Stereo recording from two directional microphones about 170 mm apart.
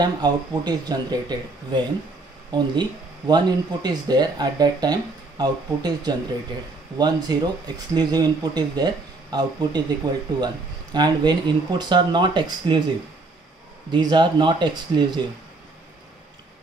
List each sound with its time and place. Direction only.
0.0 s speech: 25° right (ahead or behind)
13.8 s speech: 25° right (ahead or behind)